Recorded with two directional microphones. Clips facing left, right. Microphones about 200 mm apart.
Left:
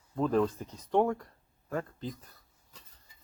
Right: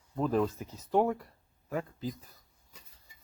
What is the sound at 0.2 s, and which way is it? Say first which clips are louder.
Speech: left 1 dB; 5° right (ahead or behind).